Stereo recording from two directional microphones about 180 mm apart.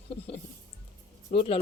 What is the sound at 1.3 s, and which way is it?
Speech, 30° left (ahead or behind).